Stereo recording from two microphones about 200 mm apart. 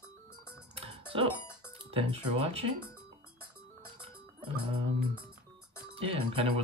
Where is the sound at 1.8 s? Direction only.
30° right (ahead or behind).